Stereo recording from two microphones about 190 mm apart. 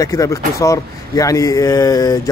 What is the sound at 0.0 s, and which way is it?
Speech, 15° left (ahead or behind).